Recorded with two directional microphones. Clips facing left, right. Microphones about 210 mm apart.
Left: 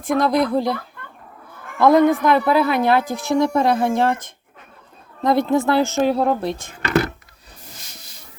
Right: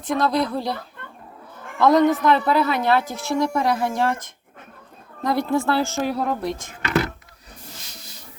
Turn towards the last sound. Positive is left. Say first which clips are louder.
# left 2 dB
turn(degrees=30)  # may be behind; listen again after turning